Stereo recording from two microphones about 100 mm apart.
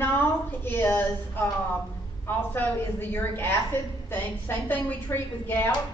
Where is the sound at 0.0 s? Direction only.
20° left (ahead or behind).